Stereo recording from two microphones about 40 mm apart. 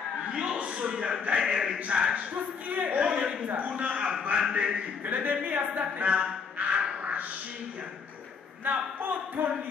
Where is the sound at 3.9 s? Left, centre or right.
Right.